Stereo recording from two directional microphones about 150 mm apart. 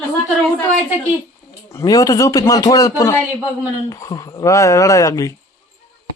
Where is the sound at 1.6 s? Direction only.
20° left (ahead or behind).